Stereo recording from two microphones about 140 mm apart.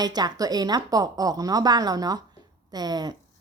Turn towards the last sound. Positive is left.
turn(degrees=-30)  # may be behind; listen again after turning